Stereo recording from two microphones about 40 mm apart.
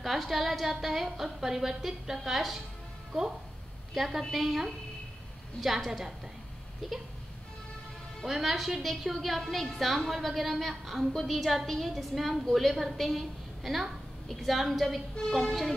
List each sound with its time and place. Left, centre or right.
0.0 s a woman's voice: centre
8.3 s a woman's voice: centre
15.2 s speech: centre